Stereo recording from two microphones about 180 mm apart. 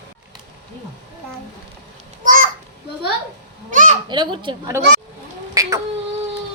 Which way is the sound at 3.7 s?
45° right (ahead or behind).